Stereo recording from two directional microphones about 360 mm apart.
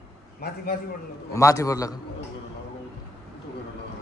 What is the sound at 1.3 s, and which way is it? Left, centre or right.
Speech, centre.